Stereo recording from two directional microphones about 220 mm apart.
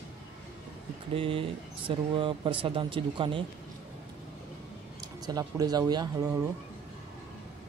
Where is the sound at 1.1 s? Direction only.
25° right (ahead or behind).